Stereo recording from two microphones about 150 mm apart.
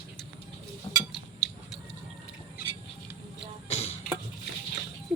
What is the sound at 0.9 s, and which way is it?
Dishes, 25° left (ahead or behind).